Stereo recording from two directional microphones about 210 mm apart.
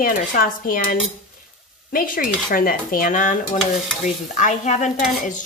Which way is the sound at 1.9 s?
45° left (ahead or behind).